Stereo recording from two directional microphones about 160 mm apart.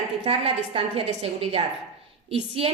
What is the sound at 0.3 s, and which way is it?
A woman's voice, 35° right (ahead or behind).